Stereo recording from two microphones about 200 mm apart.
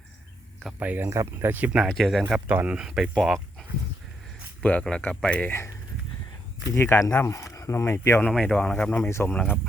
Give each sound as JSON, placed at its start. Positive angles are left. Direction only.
{"t": 0.6, "sound": "speech", "side_deg": -10}
{"t": 6.7, "sound": "speech", "side_deg": 15}